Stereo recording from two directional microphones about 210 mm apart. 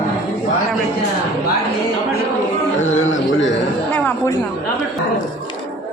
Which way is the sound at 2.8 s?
35° left (ahead or behind).